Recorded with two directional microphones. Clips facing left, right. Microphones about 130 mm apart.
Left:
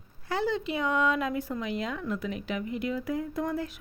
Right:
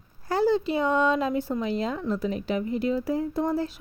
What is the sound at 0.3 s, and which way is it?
Speech, 40° right (ahead or behind).